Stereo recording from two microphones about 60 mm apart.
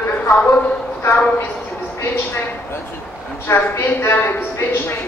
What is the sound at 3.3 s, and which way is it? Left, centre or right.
A woman's voice, left.